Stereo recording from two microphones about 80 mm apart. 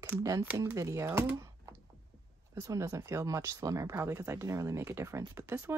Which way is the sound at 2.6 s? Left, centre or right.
Right.